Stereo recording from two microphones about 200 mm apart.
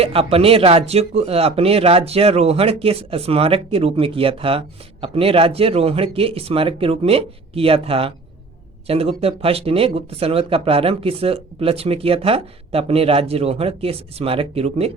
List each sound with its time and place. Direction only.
0.0 s speech: 30° right (ahead or behind)